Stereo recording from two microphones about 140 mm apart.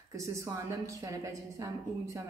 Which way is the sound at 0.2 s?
20° right (ahead or behind).